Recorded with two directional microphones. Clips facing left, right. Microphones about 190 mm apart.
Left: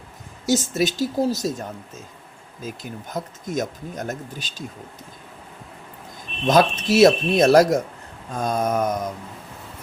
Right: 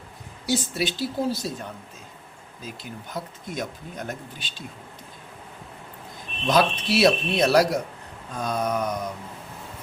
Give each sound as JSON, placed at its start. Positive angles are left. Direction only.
{"t": 0.4, "sound": "speech", "side_deg": 45}
{"t": 6.5, "sound": "speech", "side_deg": 45}